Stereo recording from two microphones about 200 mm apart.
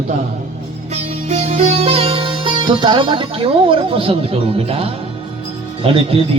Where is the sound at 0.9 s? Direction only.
30° right (ahead or behind).